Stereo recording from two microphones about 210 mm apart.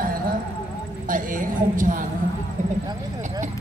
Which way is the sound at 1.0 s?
40° right (ahead or behind).